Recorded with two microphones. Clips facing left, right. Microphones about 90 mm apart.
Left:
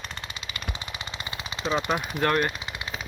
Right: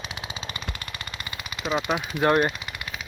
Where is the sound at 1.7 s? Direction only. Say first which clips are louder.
Even; 5° right (ahead or behind).